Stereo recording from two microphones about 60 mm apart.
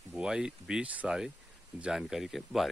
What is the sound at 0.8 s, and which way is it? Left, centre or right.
Speech, right.